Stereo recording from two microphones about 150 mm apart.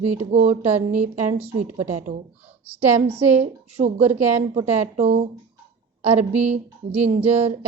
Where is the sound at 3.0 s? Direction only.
40° right (ahead or behind).